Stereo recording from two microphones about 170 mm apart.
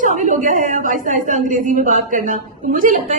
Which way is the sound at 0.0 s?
50° right (ahead or behind).